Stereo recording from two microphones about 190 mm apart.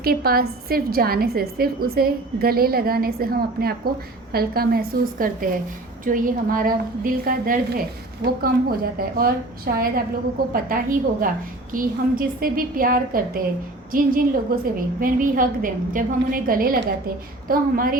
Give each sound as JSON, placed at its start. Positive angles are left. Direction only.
{"t": 0.0, "sound": "a woman's voice", "side_deg": -50}